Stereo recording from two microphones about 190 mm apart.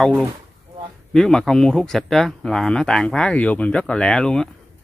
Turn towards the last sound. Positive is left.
turn(degrees=5)  # may be behind; listen again after turning